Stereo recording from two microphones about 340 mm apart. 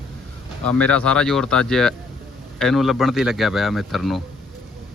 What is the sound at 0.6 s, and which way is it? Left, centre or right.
Speech, centre.